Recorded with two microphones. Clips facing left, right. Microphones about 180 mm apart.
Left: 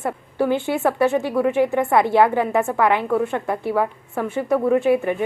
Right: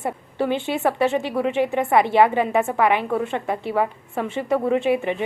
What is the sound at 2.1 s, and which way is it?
A woman's voice, 15° right (ahead or behind).